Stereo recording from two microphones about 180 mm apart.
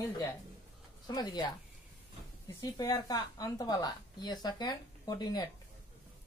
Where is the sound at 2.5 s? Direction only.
20° left (ahead or behind).